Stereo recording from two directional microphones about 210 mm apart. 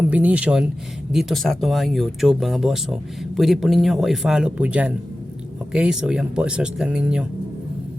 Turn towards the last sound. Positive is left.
turn(degrees=-5)  # may be behind; listen again after turning